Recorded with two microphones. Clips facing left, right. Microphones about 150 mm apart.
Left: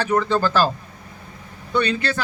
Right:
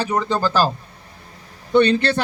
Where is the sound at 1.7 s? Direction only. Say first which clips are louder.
Right 6 dB; 30° right (ahead or behind).